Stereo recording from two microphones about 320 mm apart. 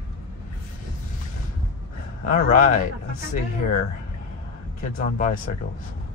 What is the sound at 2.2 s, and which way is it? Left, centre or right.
Speech, left.